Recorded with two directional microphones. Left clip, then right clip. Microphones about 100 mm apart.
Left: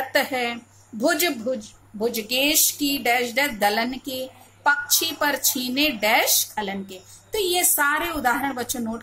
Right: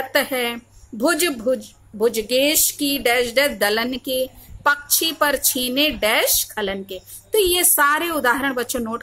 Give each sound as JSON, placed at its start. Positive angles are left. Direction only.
{"t": 0.1, "sound": "speech", "side_deg": -35}